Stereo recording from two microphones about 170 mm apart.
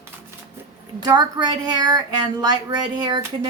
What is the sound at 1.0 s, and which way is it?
Speech, 25° right (ahead or behind).